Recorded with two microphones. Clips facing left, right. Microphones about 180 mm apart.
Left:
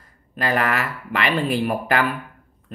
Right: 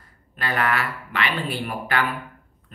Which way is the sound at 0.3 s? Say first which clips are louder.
Left 3 dB; 40° left (ahead or behind).